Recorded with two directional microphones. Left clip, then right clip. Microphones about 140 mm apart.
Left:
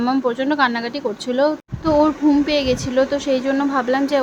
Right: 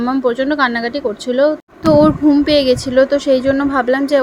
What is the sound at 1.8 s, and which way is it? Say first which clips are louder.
A child's voice: right 5 dB; 35° right (ahead or behind).